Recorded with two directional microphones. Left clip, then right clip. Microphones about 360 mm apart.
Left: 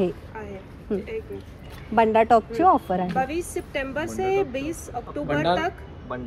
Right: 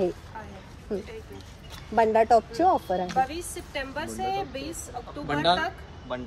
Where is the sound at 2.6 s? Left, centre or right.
Left.